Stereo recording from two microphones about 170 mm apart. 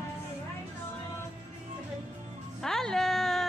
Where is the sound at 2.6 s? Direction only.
5° left (ahead or behind).